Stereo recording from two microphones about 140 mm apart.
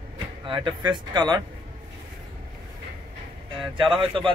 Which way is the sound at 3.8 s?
35° right (ahead or behind).